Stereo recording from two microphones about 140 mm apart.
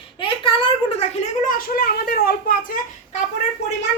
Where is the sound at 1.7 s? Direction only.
90° left.